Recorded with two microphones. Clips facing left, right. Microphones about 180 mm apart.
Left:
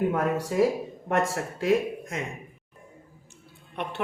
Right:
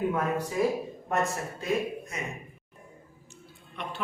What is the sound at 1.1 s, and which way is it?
Speech, 90° left.